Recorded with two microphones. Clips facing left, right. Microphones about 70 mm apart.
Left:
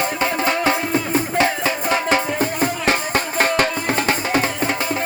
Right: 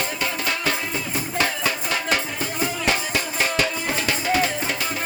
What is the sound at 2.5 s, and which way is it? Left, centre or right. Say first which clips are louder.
Music: left 4 dB; left.